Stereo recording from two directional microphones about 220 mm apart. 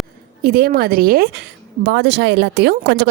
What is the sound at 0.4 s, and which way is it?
A woman's voice, 45° right (ahead or behind).